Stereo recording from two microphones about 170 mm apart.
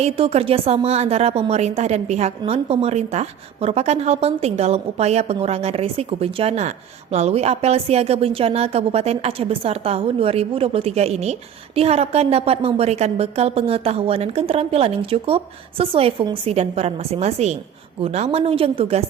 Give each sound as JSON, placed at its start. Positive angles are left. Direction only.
{"t": 0.0, "sound": "a woman's voice", "side_deg": -35}